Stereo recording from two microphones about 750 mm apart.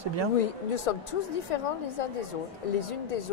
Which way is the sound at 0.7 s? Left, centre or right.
Left.